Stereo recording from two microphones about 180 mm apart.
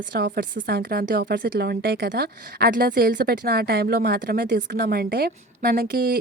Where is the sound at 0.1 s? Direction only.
75° right (ahead or behind).